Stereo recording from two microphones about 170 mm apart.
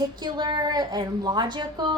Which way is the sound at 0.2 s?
25° right (ahead or behind).